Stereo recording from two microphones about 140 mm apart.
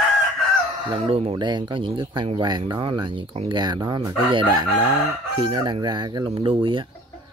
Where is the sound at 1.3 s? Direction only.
30° right (ahead or behind).